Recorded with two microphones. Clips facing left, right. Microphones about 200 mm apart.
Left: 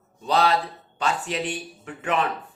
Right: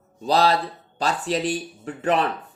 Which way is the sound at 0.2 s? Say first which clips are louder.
Right 2 dB; 35° right (ahead or behind).